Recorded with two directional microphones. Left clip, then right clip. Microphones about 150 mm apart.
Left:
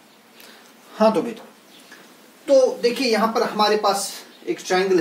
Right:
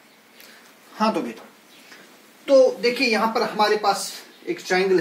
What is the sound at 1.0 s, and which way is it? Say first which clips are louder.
Speech: left 5 dB; 55° left (ahead or behind).